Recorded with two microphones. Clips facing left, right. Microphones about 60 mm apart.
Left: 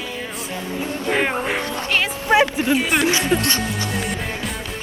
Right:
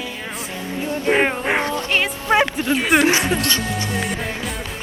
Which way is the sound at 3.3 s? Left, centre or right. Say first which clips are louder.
Left 2 dB; centre.